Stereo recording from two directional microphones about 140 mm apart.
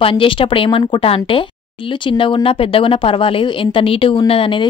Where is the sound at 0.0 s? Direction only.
40° left (ahead or behind).